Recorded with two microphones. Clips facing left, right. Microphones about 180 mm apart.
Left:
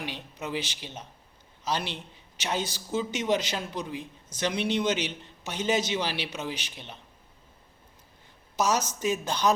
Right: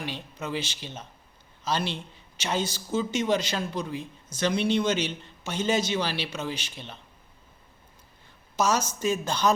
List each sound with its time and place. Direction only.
0.0 s a man's voice: 15° left (ahead or behind)
8.5 s a man's voice: 15° left (ahead or behind)